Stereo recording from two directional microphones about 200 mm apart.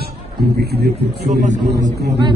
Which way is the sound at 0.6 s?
55° right (ahead or behind).